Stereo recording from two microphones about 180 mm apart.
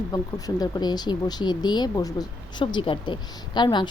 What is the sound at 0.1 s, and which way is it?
Speech, 20° left (ahead or behind).